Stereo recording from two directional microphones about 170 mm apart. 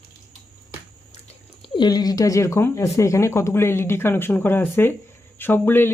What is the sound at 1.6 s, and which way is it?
Speech, 25° left (ahead or behind).